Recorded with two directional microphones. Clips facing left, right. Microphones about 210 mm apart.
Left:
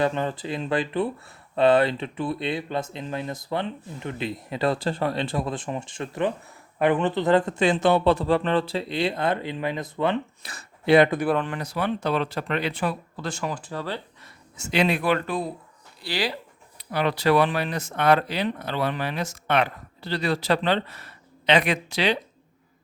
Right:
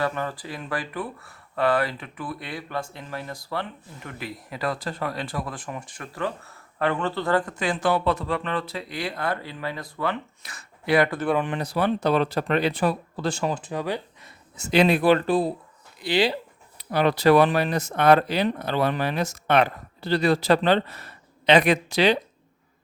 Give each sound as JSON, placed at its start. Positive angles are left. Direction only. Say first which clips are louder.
{"t": 0.0, "sound": "speech", "louder": "left 3 dB", "side_deg": 20}
{"t": 11.5, "sound": "speech", "louder": "right 3 dB", "side_deg": -35}
{"t": 14.5, "sound": "speech", "louder": "right 4 dB", "side_deg": -35}
{"t": 16.0, "sound": "speech", "louder": "right 6 dB", "side_deg": -20}
{"t": 16.7, "sound": "speech", "louder": "right 3 dB", "side_deg": -45}